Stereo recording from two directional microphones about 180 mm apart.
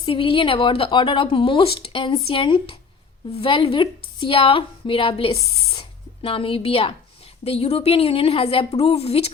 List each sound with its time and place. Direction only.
0.0 s a woman's voice: 30° left (ahead or behind)